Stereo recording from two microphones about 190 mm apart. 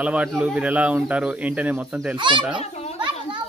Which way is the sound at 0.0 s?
5° right (ahead or behind).